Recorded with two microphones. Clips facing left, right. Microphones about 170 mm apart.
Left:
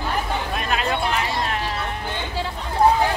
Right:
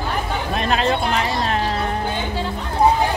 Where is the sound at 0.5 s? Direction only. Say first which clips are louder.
Right 6 dB; 30° right (ahead or behind).